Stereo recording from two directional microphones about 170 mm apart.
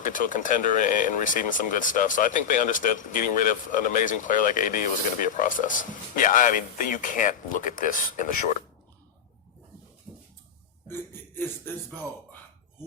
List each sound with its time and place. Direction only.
0.0 s speech: 50° left (ahead or behind)
10.8 s speech: 15° left (ahead or behind)